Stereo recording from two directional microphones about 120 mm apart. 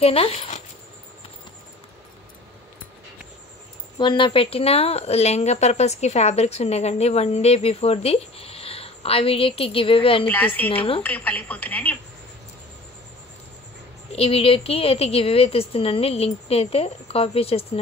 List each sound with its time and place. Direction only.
0.0 s a woman's voice: 55° left (ahead or behind)
4.0 s a woman's voice: 45° left (ahead or behind)
10.2 s speech: 15° left (ahead or behind)
14.1 s a woman's voice: 50° left (ahead or behind)